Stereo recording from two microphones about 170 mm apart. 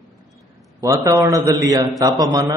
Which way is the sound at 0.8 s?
20° right (ahead or behind).